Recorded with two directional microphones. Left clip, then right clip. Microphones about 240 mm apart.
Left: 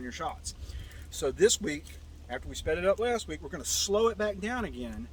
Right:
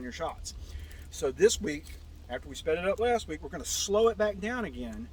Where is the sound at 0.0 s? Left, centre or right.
Centre.